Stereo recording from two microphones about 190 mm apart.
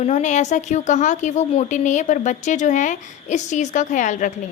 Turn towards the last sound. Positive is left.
turn(degrees=40)  # may be behind; listen again after turning